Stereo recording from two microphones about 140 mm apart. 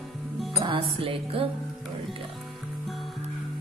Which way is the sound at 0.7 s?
40° right (ahead or behind).